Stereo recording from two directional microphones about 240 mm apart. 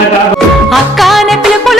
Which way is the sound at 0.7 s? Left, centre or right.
Centre.